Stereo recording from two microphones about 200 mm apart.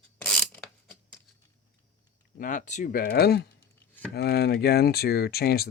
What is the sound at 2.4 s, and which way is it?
Speech, 40° left (ahead or behind).